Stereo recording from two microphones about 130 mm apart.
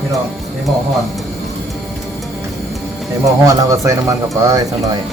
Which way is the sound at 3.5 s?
25° right (ahead or behind).